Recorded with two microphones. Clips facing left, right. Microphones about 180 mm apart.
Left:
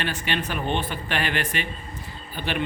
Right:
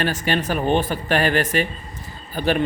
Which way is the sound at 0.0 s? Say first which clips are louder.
Right 6 dB; 40° right (ahead or behind).